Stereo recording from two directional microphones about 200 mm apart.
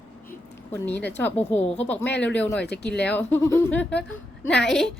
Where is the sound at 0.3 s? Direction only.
10° left (ahead or behind).